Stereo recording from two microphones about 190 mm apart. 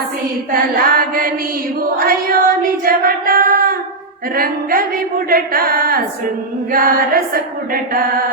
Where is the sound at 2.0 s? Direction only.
50° right (ahead or behind).